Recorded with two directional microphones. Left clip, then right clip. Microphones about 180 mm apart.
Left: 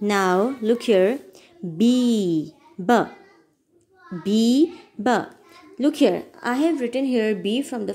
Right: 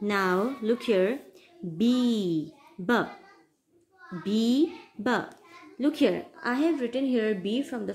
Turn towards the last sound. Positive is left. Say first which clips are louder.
# left 5 dB
turn(degrees=25)  # may be behind; listen again after turning